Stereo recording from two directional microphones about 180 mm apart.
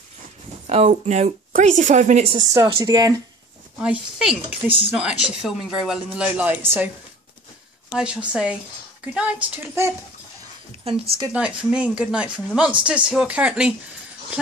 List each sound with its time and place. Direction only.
0.7 s speech: 35° right (ahead or behind)
2.3 s speech: 20° right (ahead or behind)
3.8 s speech: 5° right (ahead or behind)
7.9 s speech: 5° right (ahead or behind)
10.9 s speech: 30° right (ahead or behind)
11.3 s speech: 5° right (ahead or behind)